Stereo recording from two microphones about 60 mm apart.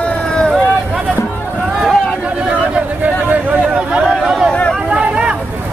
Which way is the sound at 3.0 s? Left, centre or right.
Right.